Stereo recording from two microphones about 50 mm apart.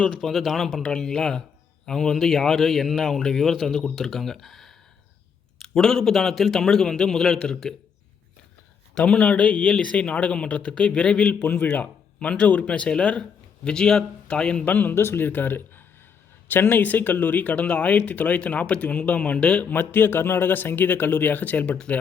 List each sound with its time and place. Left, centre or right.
0.2 s speech: centre
9.0 s speech: left
11.3 s speech: left; by 14.6 s centre
14.6 s speech: left
14.9 s speech: left
15.3 s speech: left
19.6 s speech: left